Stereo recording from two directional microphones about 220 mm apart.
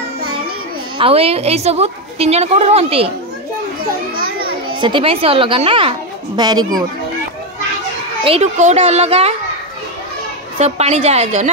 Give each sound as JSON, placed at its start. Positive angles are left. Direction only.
{"t": 0.9, "sound": "a woman's voice", "side_deg": -25}
{"t": 4.7, "sound": "a woman's voice", "side_deg": -20}
{"t": 8.2, "sound": "a woman's voice", "side_deg": -30}
{"t": 10.6, "sound": "a woman's voice", "side_deg": -30}